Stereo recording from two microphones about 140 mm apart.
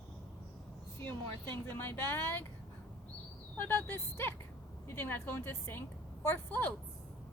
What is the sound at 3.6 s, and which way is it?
Speech, 15° left (ahead or behind).